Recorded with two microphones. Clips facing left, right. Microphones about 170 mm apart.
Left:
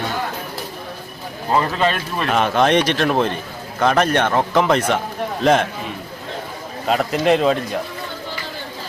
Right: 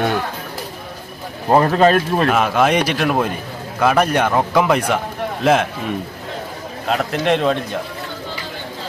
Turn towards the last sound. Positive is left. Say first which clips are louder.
# left 1 dB
turn(degrees=0)  # may be behind; listen again after turning